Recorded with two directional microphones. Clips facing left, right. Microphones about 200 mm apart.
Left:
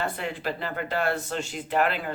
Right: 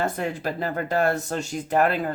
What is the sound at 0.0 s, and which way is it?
Speech, 45° right (ahead or behind).